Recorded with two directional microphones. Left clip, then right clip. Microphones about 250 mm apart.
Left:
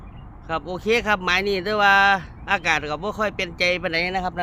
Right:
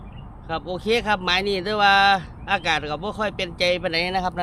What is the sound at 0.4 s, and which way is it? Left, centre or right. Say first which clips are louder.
Speech: left 1 dB; centre.